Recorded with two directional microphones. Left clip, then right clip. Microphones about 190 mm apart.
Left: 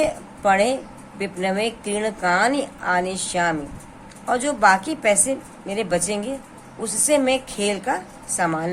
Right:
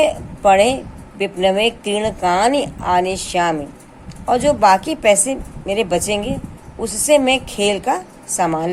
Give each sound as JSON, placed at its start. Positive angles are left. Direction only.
{"t": 0.0, "sound": "a woman's voice", "side_deg": -20}